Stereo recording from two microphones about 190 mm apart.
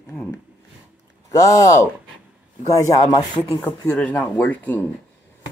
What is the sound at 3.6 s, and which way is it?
Speech, 5° left (ahead or behind).